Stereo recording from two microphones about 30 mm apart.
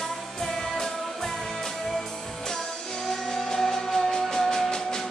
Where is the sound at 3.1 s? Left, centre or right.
Centre.